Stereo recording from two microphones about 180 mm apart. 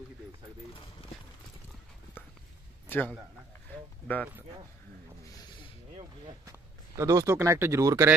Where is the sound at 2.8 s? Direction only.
10° left (ahead or behind).